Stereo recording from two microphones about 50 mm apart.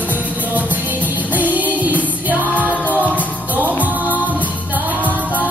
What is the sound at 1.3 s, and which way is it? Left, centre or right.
Music, right.